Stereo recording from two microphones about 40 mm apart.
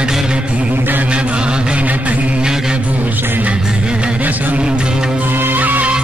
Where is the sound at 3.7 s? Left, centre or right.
Right.